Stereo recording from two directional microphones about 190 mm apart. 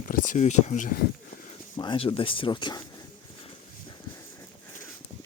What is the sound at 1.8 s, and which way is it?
Speech, 25° left (ahead or behind).